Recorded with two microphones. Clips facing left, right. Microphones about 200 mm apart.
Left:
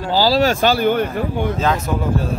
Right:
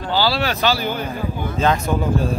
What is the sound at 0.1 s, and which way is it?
Speech, 40° left (ahead or behind).